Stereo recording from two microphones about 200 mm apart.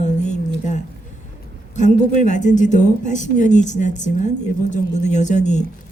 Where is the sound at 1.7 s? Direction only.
35° left (ahead or behind).